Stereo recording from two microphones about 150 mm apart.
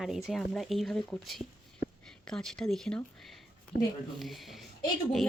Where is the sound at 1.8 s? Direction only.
90° left.